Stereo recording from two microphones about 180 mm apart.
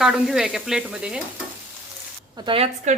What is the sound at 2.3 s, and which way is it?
Speech, 30° right (ahead or behind).